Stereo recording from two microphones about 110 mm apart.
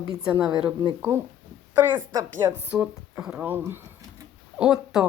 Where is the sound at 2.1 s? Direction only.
35° right (ahead or behind).